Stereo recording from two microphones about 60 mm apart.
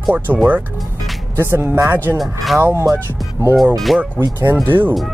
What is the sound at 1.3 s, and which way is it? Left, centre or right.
Speech, right.